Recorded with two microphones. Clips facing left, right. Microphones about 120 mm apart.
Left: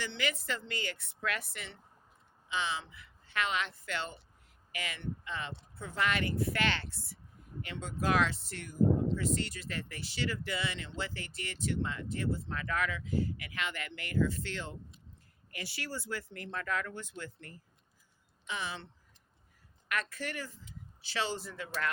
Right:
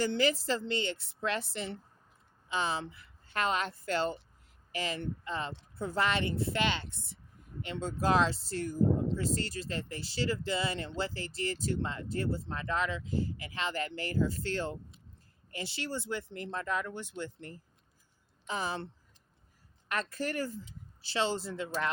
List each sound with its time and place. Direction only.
0.0 s speech: 40° right (ahead or behind)
2.5 s speech: 40° right (ahead or behind)
15.5 s speech: 25° right (ahead or behind)
18.4 s speech: 40° right (ahead or behind)
19.9 s speech: 35° right (ahead or behind)
21.0 s speech: 30° right (ahead or behind)